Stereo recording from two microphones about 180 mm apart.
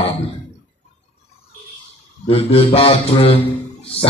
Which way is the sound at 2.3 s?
30° left (ahead or behind).